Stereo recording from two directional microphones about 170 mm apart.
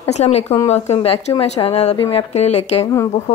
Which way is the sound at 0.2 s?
40° left (ahead or behind).